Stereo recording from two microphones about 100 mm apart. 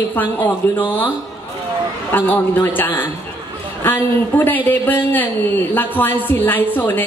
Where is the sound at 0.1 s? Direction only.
20° left (ahead or behind).